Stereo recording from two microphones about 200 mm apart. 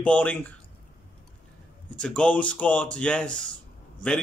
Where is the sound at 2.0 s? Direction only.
5° left (ahead or behind).